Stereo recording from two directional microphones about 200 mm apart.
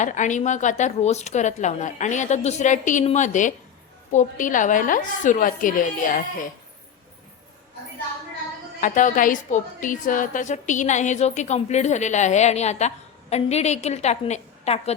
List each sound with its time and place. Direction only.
0.0 s a woman's voice: 35° left (ahead or behind)
8.8 s a woman's voice: 40° left (ahead or behind)